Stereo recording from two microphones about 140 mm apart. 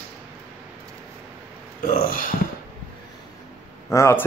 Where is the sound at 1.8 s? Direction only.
90° left.